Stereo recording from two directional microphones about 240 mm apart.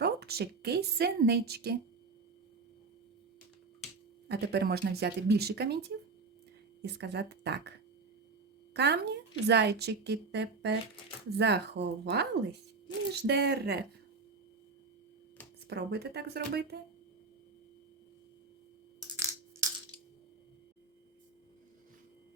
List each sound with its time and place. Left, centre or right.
0.0 s a woman's voice: right
4.3 s speech: right
8.7 s speech: right
15.6 s speech: right
19.1 s crushing: centre